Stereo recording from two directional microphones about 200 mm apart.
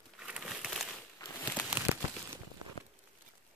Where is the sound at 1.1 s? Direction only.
10° left (ahead or behind).